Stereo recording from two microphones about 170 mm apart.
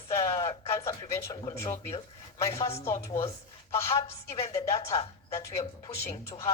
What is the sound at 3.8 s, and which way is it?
A woman's voice, 40° left (ahead or behind).